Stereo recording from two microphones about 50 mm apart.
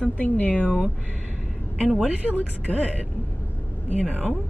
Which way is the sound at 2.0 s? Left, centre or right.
Right.